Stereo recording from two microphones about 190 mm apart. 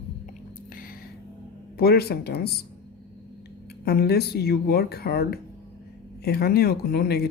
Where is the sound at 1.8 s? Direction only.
55° left (ahead or behind).